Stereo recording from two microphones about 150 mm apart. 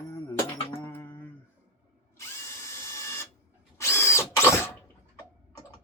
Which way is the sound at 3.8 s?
20° left (ahead or behind).